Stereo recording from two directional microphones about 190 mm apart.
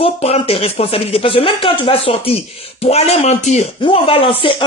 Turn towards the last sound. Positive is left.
turn(degrees=30)  # may be behind; listen again after turning